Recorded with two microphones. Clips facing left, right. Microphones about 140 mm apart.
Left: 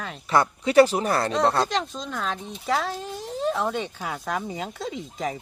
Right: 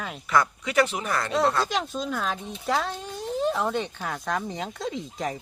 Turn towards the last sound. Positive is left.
turn(degrees=0)  # may be behind; listen again after turning